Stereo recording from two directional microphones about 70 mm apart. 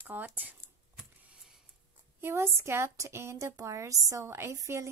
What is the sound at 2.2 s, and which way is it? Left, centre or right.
A woman's voice, right.